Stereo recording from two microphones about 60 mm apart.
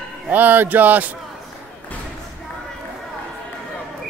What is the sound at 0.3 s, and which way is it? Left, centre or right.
Speech, right.